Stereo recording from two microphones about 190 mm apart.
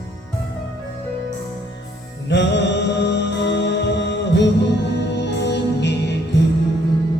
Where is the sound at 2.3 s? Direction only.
65° left (ahead or behind).